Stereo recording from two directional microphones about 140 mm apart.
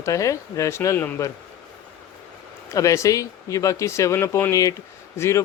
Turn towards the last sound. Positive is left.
turn(degrees=20)  # may be behind; listen again after turning